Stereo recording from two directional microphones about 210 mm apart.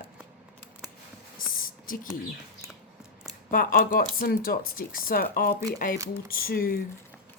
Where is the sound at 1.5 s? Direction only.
40° left (ahead or behind).